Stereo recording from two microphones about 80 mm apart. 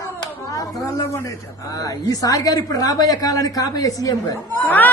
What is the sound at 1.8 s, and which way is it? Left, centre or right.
A woman's voice, left.